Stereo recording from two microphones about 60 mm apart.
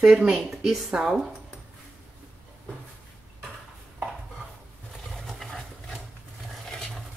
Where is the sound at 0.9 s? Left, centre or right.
Centre.